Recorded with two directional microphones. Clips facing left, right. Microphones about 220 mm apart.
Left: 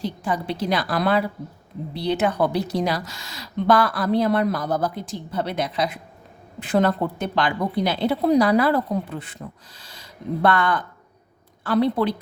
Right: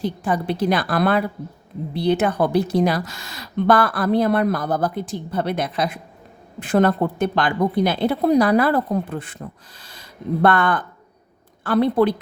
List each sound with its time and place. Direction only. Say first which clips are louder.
0.0 s a woman's voice: right 3 dB; 50° right (ahead or behind)